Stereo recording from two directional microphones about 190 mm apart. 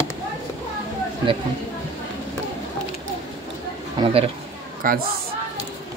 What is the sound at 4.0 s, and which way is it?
Speech, 30° right (ahead or behind).